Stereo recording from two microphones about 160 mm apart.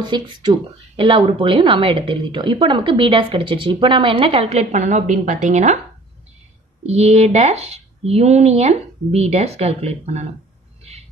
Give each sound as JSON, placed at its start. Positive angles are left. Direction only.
{"t": 0.0, "sound": "speech", "side_deg": -25}
{"t": 6.9, "sound": "speech", "side_deg": -40}
{"t": 10.8, "sound": "owl", "side_deg": -40}